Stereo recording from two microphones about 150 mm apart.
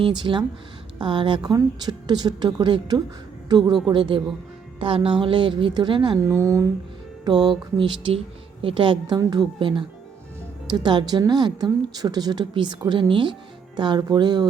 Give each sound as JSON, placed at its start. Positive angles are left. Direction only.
{"t": 0.2, "sound": "a woman's voice", "side_deg": -30}
{"t": 6.2, "sound": "a woman's voice", "side_deg": -20}